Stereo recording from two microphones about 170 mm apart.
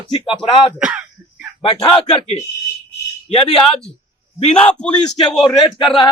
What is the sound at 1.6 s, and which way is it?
Speech, 30° left (ahead or behind).